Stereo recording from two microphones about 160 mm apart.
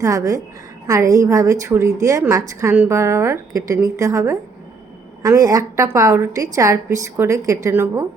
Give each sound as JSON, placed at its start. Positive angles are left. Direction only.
{"t": 0.0, "sound": "a woman's voice", "side_deg": -20}